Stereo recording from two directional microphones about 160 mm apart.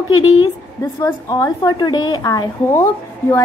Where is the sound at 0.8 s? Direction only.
20° left (ahead or behind).